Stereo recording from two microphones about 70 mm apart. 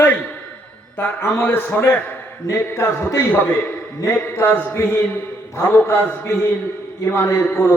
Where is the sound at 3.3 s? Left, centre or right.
Left.